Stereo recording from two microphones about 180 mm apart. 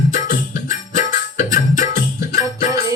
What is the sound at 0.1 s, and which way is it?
Music, 45° left (ahead or behind).